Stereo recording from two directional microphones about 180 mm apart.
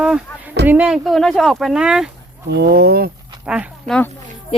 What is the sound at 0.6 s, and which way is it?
A woman's voice, 5° right (ahead or behind).